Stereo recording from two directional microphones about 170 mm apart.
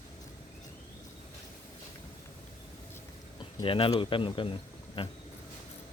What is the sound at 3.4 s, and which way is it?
Speech, 30° left (ahead or behind).